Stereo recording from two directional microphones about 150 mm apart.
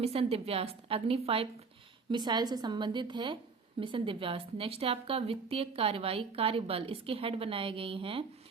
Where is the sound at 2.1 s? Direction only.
30° right (ahead or behind).